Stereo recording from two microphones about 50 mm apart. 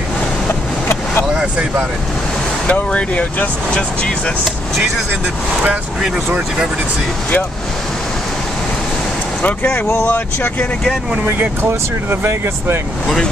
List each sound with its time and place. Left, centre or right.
1.3 s vehicle: centre
2.6 s speech: left
9.4 s speech: left
12.1 s speech: right